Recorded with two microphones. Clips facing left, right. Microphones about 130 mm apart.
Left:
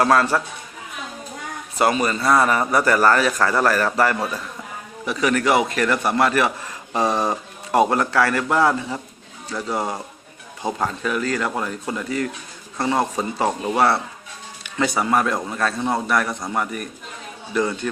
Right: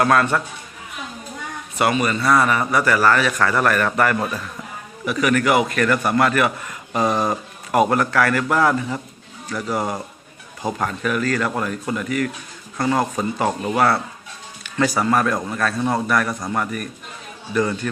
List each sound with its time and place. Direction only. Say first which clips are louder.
0.0 s a man's voice: even; 25° left (ahead or behind)
1.8 s a man's voice: even; 30° left (ahead or behind)